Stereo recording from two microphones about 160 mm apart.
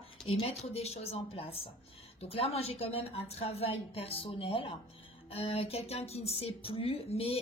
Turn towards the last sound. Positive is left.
turn(degrees=35)  # may be behind; listen again after turning